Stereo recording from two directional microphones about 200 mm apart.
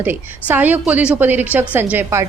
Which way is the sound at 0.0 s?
10° right (ahead or behind).